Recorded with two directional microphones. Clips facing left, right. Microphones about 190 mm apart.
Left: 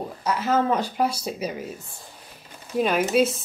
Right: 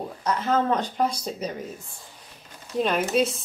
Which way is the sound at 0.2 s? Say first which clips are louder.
Left 1 dB; 5° left (ahead or behind).